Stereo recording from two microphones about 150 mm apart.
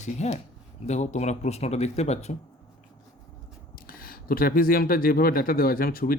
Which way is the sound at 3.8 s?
75° left (ahead or behind).